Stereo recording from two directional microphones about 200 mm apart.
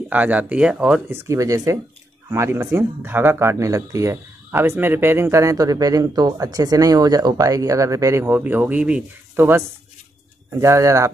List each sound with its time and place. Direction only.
0.1 s speech: 10° right (ahead or behind)